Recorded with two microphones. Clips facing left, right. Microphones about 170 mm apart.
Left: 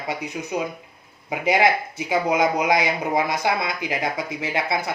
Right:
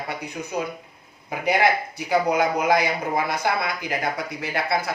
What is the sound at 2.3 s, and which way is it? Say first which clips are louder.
Speech: even; 15° left (ahead or behind).